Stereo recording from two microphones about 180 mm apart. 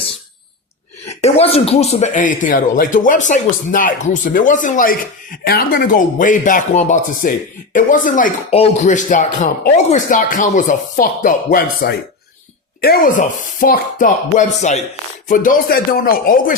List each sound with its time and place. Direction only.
1.0 s speech: 35° left (ahead or behind)
8.4 s speech: 35° left (ahead or behind); by 16.6 s 55° left (ahead or behind)